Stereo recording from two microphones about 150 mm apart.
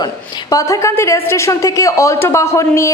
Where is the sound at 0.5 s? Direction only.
20° left (ahead or behind).